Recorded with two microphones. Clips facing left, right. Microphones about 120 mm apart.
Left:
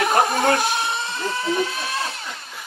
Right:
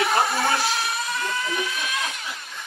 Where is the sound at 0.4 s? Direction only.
55° left (ahead or behind).